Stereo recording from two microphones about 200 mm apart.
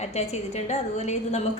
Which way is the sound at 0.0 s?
30° left (ahead or behind).